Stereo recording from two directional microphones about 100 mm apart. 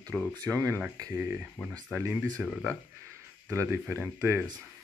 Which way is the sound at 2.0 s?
20° right (ahead or behind).